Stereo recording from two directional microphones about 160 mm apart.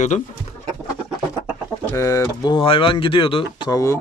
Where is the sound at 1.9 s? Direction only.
20° left (ahead or behind).